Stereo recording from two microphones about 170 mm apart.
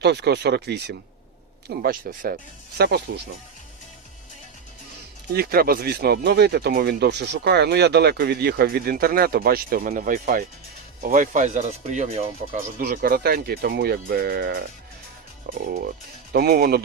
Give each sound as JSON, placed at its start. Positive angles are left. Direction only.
{"t": 0.0, "sound": "speech", "side_deg": -80}
{"t": 1.7, "sound": "speech", "side_deg": -60}
{"t": 5.3, "sound": "speech", "side_deg": -65}
{"t": 12.5, "sound": "speech", "side_deg": -55}